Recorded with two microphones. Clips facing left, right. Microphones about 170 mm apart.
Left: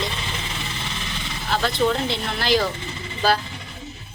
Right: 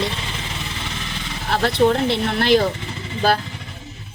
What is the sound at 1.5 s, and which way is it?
Speech, 65° right (ahead or behind).